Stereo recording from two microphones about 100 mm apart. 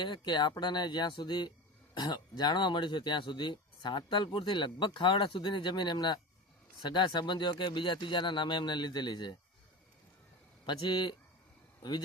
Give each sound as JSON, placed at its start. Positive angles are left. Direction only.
{"t": 0.0, "sound": "speech", "side_deg": 50}
{"t": 10.7, "sound": "speech", "side_deg": 50}